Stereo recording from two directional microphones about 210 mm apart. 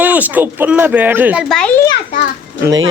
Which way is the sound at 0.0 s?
10° right (ahead or behind).